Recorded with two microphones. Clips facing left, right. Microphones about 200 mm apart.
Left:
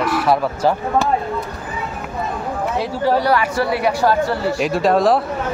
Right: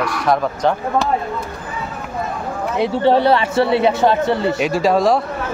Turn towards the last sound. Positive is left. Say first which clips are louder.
# even
turn(degrees=0)  # may be behind; listen again after turning